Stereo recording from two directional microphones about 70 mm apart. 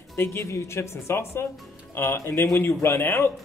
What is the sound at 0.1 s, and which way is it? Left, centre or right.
Speech, left.